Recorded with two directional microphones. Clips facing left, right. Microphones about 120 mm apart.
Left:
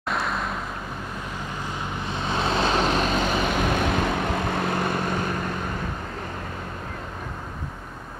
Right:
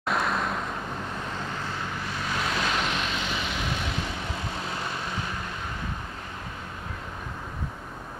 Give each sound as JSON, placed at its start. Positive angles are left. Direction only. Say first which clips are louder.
{"t": 0.1, "sound": "vehicle", "louder": "even", "side_deg": 0}
{"t": 2.0, "sound": "vehicle", "louder": "left 6 dB", "side_deg": 25}